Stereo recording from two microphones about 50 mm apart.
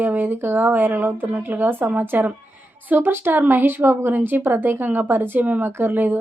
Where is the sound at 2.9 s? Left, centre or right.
Right.